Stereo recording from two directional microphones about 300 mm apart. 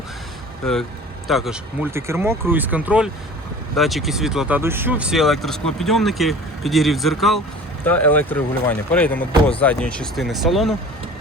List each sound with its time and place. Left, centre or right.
0.6 s speech: centre